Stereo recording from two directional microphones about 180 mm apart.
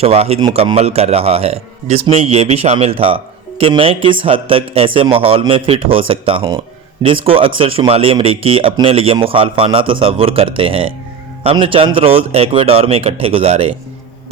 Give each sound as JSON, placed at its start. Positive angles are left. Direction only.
{"t": 0.0, "sound": "a man's voice", "side_deg": -35}